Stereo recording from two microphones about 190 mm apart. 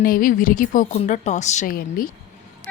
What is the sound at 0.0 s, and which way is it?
Speech, 50° left (ahead or behind).